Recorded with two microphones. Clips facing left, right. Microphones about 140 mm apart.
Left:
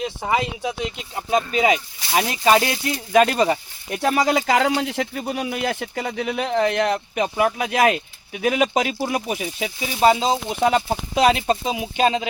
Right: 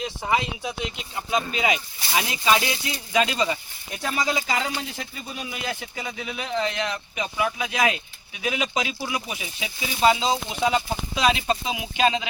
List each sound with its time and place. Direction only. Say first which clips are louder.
0.0 s speech: left 3 dB; 40° left (ahead or behind)
1.5 s speech: left 6 dB; 40° left (ahead or behind)